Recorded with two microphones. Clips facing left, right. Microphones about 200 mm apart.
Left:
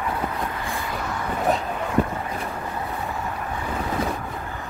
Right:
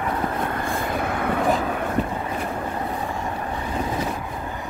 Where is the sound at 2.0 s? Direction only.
45° left (ahead or behind).